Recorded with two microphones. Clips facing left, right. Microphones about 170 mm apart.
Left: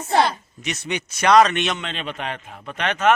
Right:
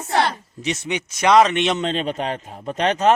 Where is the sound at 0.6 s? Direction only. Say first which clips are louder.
Right 3 dB; 20° right (ahead or behind).